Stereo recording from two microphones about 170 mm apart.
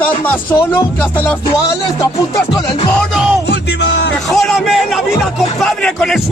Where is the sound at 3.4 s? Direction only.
90° left.